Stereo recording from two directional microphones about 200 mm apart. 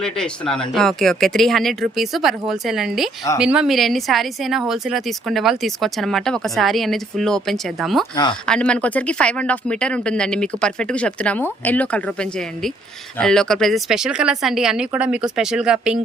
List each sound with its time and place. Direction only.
0.0 s speech: 5° left (ahead or behind)
8.1 s speech: 20° left (ahead or behind)
8.4 s speech: 5° left (ahead or behind)